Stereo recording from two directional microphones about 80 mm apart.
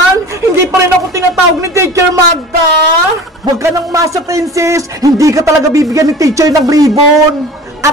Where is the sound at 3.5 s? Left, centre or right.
Right.